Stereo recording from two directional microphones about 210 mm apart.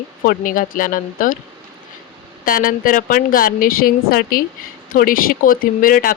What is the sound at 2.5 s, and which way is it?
Speech, 40° left (ahead or behind).